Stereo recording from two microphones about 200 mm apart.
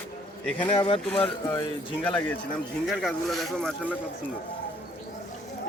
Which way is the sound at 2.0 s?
5° left (ahead or behind).